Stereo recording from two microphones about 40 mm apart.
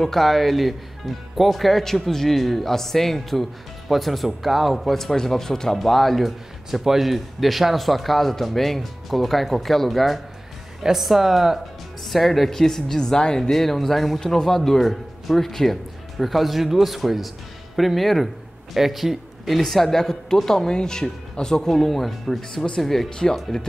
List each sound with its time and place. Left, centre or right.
0.0 s speech: centre
13.4 s a man's voice: centre
19.6 s speech: centre
20.6 s speech: centre
23.0 s speech: centre